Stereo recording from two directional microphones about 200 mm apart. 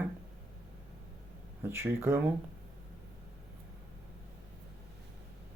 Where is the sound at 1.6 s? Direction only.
10° right (ahead or behind).